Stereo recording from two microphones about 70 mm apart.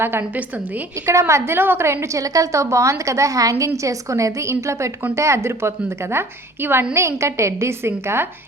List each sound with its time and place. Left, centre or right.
0.0 s a woman's voice: right
2.2 s a woman's voice: right